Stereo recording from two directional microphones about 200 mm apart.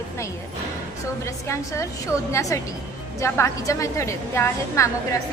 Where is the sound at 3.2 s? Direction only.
15° left (ahead or behind).